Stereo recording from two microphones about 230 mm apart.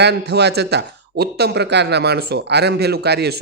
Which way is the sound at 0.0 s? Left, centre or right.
Right.